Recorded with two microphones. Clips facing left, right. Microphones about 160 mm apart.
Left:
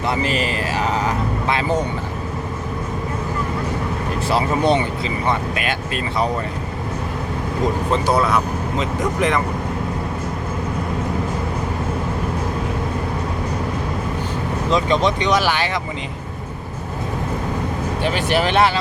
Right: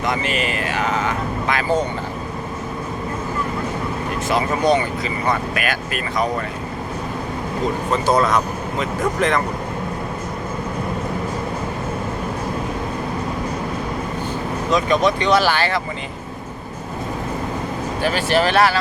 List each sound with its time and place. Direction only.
0.1 s vehicle: 35° left (ahead or behind)
4.3 s speech: 30° left (ahead or behind)
8.0 s speech: 10° left (ahead or behind)
14.7 s speech: 25° left (ahead or behind)
18.0 s speech: 20° left (ahead or behind)